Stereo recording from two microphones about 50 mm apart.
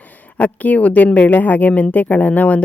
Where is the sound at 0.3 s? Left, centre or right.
Left.